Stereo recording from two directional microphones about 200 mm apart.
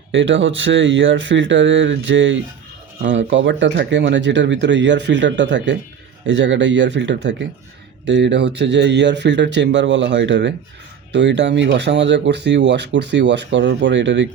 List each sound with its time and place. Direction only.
0.1 s speech: 70° right (ahead or behind)